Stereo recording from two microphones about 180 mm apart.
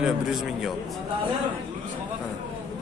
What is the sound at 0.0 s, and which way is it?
Speech, centre (ahead or behind).